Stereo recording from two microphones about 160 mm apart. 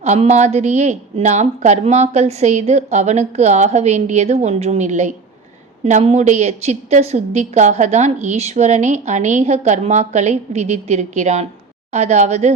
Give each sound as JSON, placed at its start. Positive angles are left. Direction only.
{"t": 0.0, "sound": "a woman's voice", "side_deg": -45}